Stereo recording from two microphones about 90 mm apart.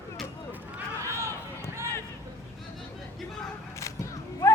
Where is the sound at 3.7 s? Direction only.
35° left (ahead or behind).